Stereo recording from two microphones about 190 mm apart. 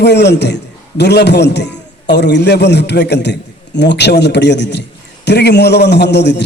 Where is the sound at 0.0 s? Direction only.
65° left (ahead or behind).